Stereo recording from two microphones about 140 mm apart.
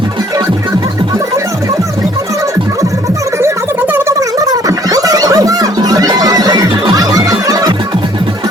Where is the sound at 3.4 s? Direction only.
15° right (ahead or behind).